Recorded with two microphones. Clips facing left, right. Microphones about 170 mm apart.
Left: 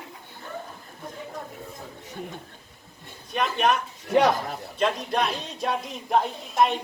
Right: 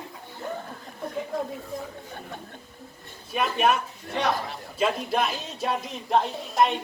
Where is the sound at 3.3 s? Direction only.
5° right (ahead or behind).